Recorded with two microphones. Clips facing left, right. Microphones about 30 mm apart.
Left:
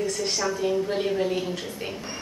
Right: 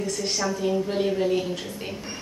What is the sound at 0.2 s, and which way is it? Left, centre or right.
A woman's voice, centre.